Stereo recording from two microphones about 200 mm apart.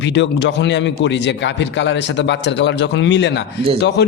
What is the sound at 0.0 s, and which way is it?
A man's voice, 60° left (ahead or behind).